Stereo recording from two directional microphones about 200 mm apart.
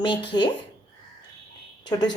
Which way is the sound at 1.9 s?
15° left (ahead or behind).